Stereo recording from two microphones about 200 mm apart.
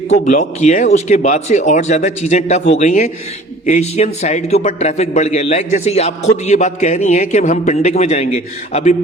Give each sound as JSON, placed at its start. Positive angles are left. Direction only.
{"t": 0.1, "sound": "a man's voice", "side_deg": 35}